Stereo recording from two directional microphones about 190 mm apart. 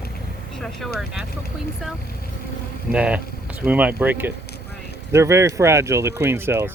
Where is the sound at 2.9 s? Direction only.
5° right (ahead or behind).